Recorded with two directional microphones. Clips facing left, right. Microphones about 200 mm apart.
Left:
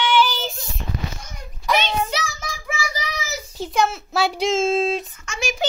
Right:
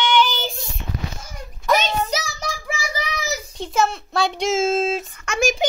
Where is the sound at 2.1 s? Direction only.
40° right (ahead or behind).